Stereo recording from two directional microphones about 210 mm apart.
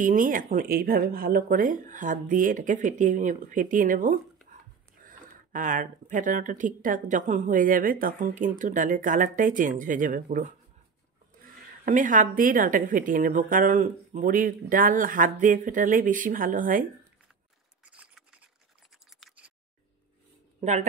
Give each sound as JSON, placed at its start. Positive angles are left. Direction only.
{"t": 0.0, "sound": "speech", "side_deg": -40}
{"t": 17.9, "sound": "patter", "side_deg": -5}
{"t": 19.0, "sound": "scissors", "side_deg": 0}